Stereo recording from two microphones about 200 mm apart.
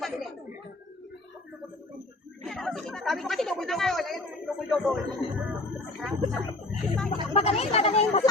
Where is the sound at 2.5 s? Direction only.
Centre (ahead or behind).